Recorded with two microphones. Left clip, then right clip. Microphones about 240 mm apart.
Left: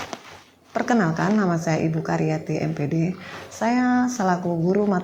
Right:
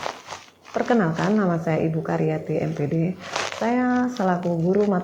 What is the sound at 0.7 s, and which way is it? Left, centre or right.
Speech, left.